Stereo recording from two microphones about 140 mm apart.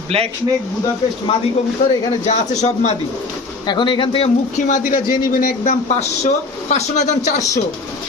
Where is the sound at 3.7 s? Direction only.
35° left (ahead or behind).